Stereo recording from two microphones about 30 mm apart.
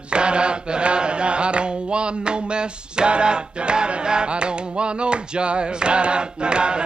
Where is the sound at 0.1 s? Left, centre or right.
Right.